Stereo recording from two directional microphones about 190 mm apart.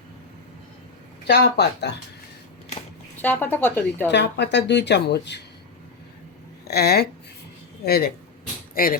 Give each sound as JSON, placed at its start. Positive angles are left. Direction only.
{"t": 1.3, "sound": "speech", "side_deg": 60}
{"t": 3.2, "sound": "a woman's voice", "side_deg": 10}
{"t": 4.1, "sound": "speech", "side_deg": 65}
{"t": 6.7, "sound": "speech", "side_deg": 55}